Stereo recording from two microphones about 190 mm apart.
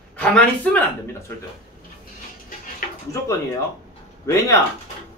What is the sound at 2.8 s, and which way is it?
Music, 50° left (ahead or behind).